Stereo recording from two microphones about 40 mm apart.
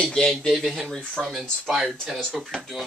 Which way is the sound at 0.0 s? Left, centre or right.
Centre.